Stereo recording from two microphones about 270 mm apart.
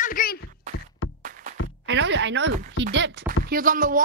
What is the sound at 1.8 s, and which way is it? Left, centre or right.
Speech, right.